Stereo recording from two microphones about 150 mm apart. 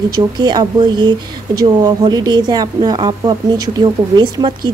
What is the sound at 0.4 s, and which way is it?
Speech, 30° right (ahead or behind).